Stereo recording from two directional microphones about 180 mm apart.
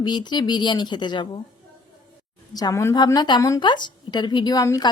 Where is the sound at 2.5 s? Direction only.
20° left (ahead or behind).